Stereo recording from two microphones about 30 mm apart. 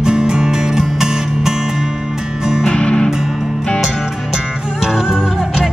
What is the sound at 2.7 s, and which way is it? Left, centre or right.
Music, left.